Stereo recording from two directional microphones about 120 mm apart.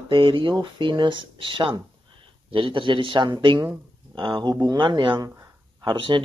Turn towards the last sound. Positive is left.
turn(degrees=-40)  # may be behind; listen again after turning